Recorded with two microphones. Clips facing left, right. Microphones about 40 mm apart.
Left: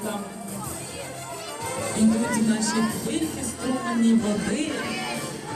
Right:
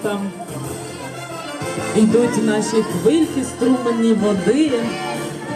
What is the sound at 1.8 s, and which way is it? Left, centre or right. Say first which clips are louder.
Speech: right 8 dB; right.